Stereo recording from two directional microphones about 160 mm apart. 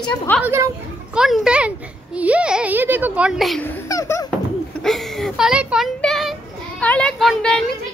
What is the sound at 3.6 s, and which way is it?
Speech, 20° left (ahead or behind).